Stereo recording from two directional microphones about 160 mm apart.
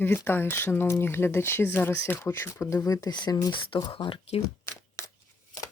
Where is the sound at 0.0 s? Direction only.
15° left (ahead or behind); by 4.4 s 35° left (ahead or behind).